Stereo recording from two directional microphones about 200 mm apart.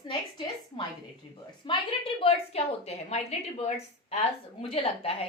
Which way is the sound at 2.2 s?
30° left (ahead or behind).